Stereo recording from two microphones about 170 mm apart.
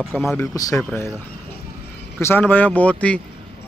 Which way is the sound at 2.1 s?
10° left (ahead or behind).